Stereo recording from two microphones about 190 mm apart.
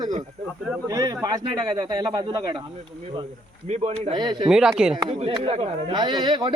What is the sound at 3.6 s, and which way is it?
Speech, 35° right (ahead or behind).